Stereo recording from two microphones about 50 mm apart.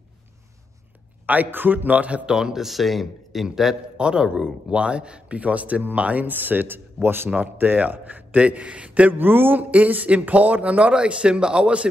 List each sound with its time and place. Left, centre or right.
1.2 s a man's voice: right
2.2 s a man's voice: centre
3.9 s a man's voice: centre; by 7.2 s right
7.5 s a man's voice: right
9.1 s a man's voice: right